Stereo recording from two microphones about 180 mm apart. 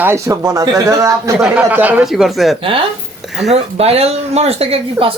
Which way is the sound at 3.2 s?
Centre (ahead or behind).